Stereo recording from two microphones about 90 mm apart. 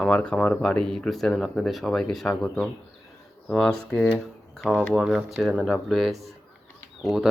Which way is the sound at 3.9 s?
15° left (ahead or behind).